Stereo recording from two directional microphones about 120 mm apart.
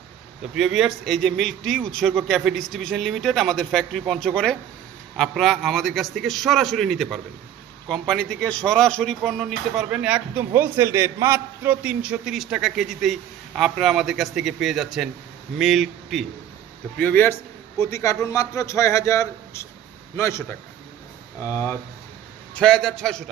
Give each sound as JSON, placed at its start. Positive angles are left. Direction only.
{"t": 0.5, "sound": "speech", "side_deg": -5}
{"t": 17.0, "sound": "a man's voice", "side_deg": 15}
{"t": 17.7, "sound": "a man's voice", "side_deg": 25}
{"t": 21.4, "sound": "a man's voice", "side_deg": 20}
{"t": 22.5, "sound": "speech", "side_deg": 5}